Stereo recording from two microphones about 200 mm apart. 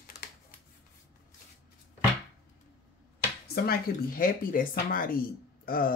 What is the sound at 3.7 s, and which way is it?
Speech, 45° left (ahead or behind).